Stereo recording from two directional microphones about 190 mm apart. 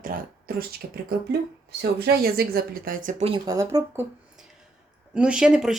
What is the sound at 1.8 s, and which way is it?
Speech, 55° right (ahead or behind).